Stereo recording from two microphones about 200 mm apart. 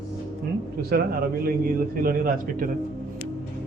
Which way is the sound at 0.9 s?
50° right (ahead or behind).